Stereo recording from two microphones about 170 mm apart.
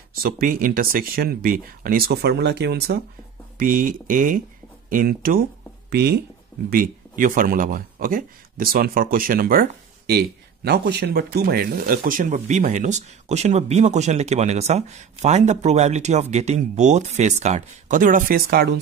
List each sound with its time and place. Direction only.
0.1 s speech: 60° right (ahead or behind)
3.5 s speech: 55° right (ahead or behind)
5.9 s speech: 70° right (ahead or behind)
6.7 s speech: 55° right (ahead or behind)